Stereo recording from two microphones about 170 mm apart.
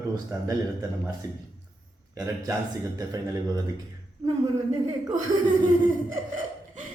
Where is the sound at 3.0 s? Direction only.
20° right (ahead or behind).